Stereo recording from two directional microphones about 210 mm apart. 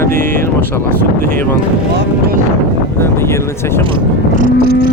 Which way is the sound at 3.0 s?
10° left (ahead or behind).